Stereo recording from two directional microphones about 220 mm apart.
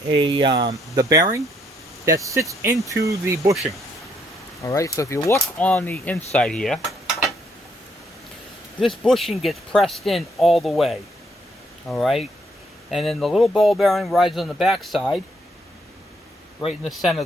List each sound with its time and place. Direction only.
0.1 s speech: 20° right (ahead or behind)
4.6 s speech: 15° left (ahead or behind)
8.8 s speech: centre (ahead or behind)
16.6 s speech: centre (ahead or behind)